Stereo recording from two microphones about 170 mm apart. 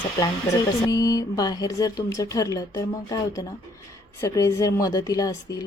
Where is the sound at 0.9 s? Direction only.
20° left (ahead or behind).